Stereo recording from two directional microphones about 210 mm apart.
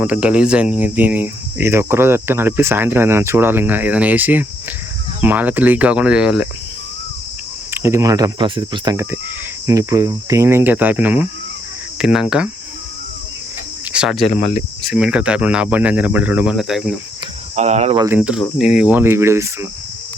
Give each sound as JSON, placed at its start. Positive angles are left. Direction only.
{"t": 0.0, "sound": "cricket", "side_deg": -5}
{"t": 7.7, "sound": "cricket", "side_deg": -10}
{"t": 11.9, "sound": "speech", "side_deg": -5}
{"t": 13.9, "sound": "speech", "side_deg": -5}
{"t": 14.3, "sound": "cricket", "side_deg": 30}
{"t": 14.8, "sound": "speech", "side_deg": -5}
{"t": 17.5, "sound": "cricket", "side_deg": -30}
{"t": 17.9, "sound": "cricket", "side_deg": -15}
{"t": 18.2, "sound": "speech", "side_deg": -5}
{"t": 18.8, "sound": "cricket", "side_deg": -10}